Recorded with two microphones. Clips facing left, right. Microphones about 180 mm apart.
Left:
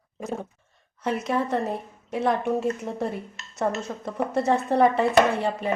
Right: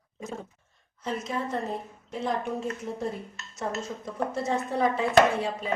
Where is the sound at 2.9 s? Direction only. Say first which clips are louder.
Left 3 dB; 65° left (ahead or behind).